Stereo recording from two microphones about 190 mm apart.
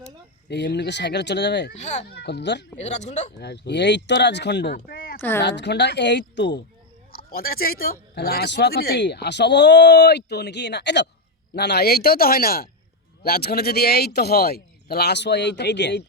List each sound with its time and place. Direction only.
0.4 s speech: 65° left (ahead or behind)
1.8 s speech: 35° left (ahead or behind)
2.0 s speech: 60° left (ahead or behind)
2.7 s speech: 35° left (ahead or behind)
3.3 s speech: 65° left (ahead or behind)
5.4 s speech: 65° left (ahead or behind)
7.1 s speech: 50° left (ahead or behind)